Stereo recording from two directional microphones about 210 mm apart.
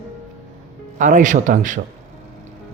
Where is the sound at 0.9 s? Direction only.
35° right (ahead or behind).